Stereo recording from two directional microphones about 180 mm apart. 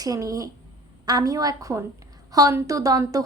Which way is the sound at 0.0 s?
20° right (ahead or behind).